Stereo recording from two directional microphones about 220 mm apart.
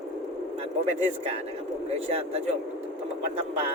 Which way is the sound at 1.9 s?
30° right (ahead or behind).